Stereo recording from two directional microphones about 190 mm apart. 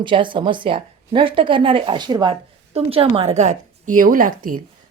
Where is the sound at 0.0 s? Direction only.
25° right (ahead or behind).